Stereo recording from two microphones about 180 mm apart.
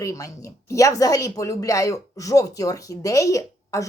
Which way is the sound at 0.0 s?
15° left (ahead or behind).